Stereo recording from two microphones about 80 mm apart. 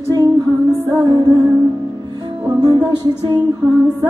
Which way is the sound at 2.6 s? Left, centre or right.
Right.